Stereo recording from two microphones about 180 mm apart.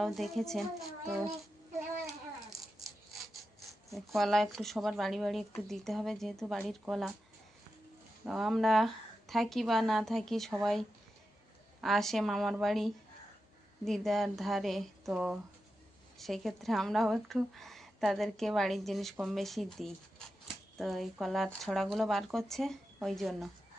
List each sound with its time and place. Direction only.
0.0 s speech: centre (ahead or behind)
3.9 s speech: centre (ahead or behind)
8.2 s speech: 5° right (ahead or behind)